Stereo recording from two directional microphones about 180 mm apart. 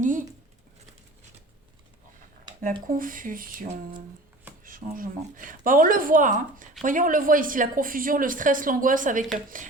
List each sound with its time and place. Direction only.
0.0 s speech: 45° right (ahead or behind)
2.5 s a sound: 25° right (ahead or behind)
2.9 s a woman's voice: 50° right (ahead or behind)